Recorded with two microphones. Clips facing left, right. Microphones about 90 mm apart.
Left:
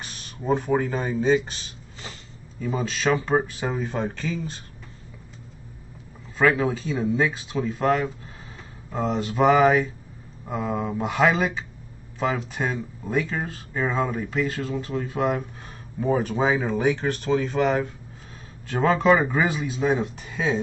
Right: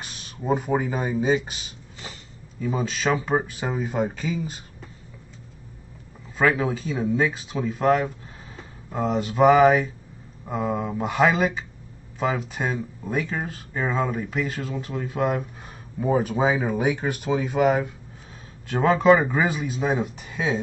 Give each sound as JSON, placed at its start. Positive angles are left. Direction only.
{"t": 0.0, "sound": "speech", "side_deg": -5}
{"t": 6.3, "sound": "speech", "side_deg": 0}